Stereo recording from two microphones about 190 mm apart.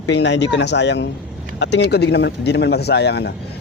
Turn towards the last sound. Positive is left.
turn(degrees=60)  # may be behind; listen again after turning